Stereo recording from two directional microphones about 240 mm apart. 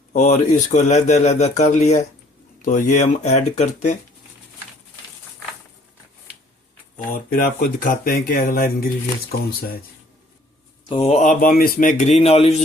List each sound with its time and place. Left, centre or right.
0.1 s a man's voice: left
6.9 s speech: left
10.8 s a man's voice: left